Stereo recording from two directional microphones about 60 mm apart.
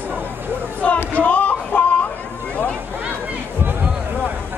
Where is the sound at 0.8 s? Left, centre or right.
Left.